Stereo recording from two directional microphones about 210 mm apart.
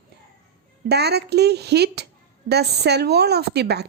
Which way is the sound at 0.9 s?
50° right (ahead or behind).